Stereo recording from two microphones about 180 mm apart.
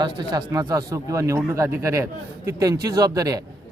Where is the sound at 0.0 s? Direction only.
20° right (ahead or behind).